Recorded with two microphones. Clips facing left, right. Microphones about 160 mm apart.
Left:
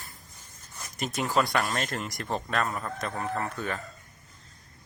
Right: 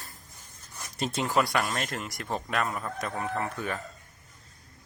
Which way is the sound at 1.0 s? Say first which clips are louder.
Right 1 dB; 30° right (ahead or behind).